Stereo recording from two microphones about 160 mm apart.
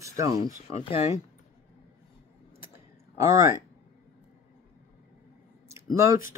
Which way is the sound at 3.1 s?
20° right (ahead or behind).